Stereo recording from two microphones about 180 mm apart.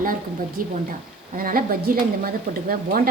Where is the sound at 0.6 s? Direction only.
50° right (ahead or behind).